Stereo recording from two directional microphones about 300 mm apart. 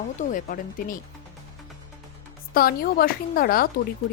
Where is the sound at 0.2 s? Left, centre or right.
Left.